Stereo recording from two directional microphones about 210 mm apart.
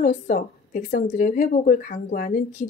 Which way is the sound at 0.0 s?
40° left (ahead or behind).